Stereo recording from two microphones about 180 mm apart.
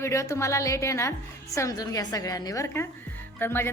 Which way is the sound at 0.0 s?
15° left (ahead or behind).